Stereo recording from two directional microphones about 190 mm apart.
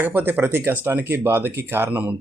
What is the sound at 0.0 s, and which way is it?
Speech, 10° right (ahead or behind).